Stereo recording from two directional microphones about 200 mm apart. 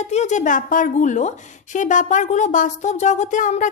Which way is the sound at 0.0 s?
35° left (ahead or behind).